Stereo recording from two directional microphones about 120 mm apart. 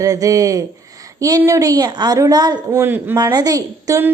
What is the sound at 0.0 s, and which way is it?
A woman's voice, 30° right (ahead or behind).